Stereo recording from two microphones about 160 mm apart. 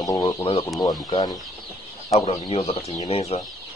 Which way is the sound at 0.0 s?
25° left (ahead or behind).